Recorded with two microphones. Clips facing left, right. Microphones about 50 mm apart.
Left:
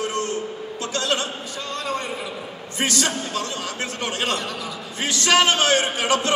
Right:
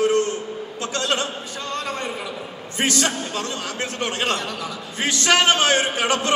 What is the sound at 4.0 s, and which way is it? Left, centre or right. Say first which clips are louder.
A man's voice: right 1 dB; right.